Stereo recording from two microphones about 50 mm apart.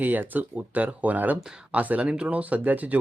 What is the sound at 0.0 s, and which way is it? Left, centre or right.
Speech, right.